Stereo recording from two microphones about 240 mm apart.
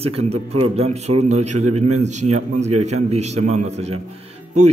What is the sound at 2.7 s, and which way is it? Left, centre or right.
Speech, right.